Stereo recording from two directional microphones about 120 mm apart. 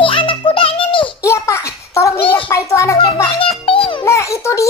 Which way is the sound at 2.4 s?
25° left (ahead or behind).